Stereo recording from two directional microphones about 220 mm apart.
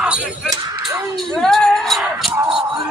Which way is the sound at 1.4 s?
Centre (ahead or behind).